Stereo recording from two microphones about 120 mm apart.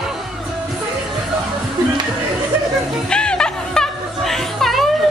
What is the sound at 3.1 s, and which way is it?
Music, 5° left (ahead or behind).